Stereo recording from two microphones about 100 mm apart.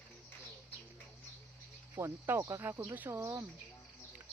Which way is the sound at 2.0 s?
25° right (ahead or behind).